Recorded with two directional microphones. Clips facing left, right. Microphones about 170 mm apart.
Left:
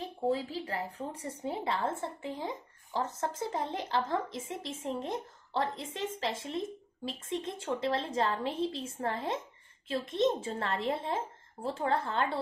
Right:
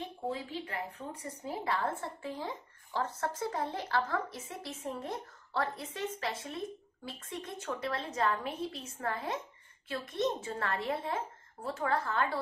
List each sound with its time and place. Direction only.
0.0 s a woman's voice: 35° left (ahead or behind)